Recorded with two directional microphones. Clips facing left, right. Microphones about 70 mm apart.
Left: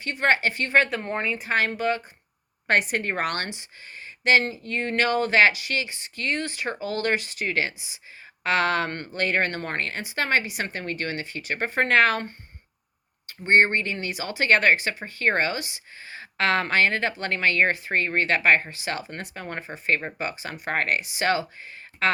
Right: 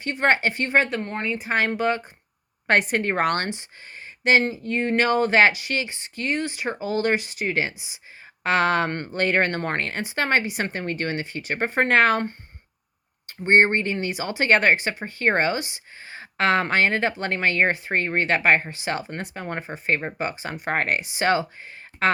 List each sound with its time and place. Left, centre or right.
0.0 s speech: right
1.2 s speech: centre
1.5 s speech: right
6.2 s speech: centre